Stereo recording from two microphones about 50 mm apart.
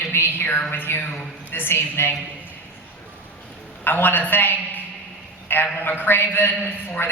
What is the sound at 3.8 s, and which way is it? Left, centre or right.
A woman's voice, left.